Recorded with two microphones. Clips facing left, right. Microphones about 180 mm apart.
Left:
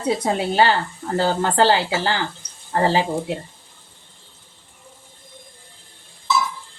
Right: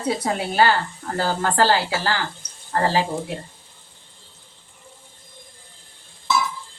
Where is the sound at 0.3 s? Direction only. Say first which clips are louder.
Right 1 dB; 25° left (ahead or behind).